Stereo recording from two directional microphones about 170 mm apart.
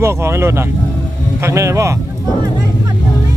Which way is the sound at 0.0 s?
15° right (ahead or behind).